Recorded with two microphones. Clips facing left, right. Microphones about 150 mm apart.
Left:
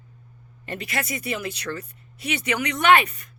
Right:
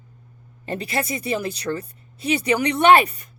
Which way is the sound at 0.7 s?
30° right (ahead or behind).